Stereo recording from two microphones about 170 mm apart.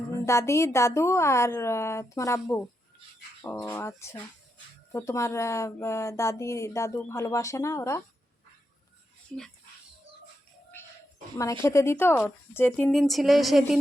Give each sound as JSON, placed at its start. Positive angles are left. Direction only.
{"t": 0.3, "sound": "speech", "side_deg": 15}
{"t": 9.3, "sound": "speech", "side_deg": 5}
{"t": 11.6, "sound": "speech", "side_deg": 15}